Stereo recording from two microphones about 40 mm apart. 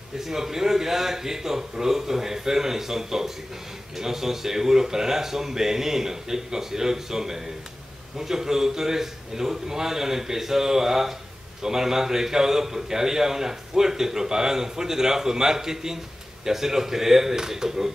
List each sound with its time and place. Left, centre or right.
0.2 s a man's voice: centre